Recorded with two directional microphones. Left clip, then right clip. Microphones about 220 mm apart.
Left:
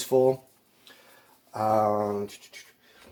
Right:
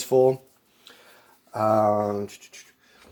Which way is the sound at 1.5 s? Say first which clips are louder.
Right 3 dB; 40° right (ahead or behind).